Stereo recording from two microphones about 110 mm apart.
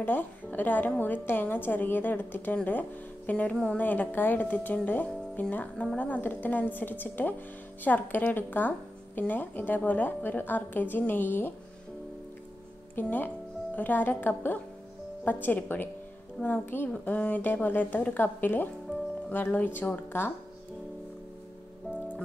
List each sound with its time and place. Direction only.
0.0 s a woman's voice: 15° left (ahead or behind)
12.9 s a woman's voice: 15° left (ahead or behind)